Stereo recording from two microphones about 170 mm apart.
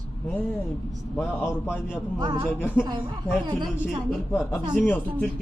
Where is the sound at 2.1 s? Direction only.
30° right (ahead or behind).